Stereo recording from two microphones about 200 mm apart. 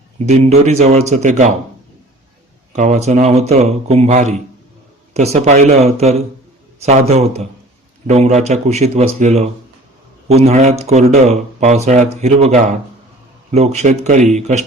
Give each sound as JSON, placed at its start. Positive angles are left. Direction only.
{"t": 0.3, "sound": "speech", "side_deg": -30}
{"t": 2.7, "sound": "speech", "side_deg": -35}